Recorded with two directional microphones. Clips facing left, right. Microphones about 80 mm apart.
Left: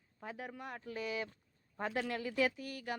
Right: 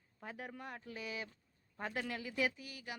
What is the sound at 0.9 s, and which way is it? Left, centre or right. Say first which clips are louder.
Speech: left 7 dB; centre.